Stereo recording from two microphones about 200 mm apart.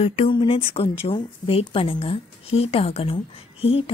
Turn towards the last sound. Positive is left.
turn(degrees=30)  # may be behind; listen again after turning